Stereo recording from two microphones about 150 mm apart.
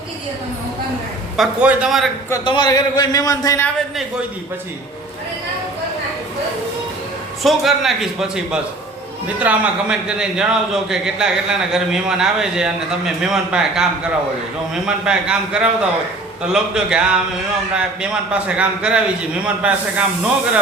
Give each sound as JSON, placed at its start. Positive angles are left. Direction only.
{"t": 1.4, "sound": "a man's voice", "side_deg": -5}
{"t": 2.4, "sound": "a man's voice", "side_deg": 30}
{"t": 7.4, "sound": "a man's voice", "side_deg": 0}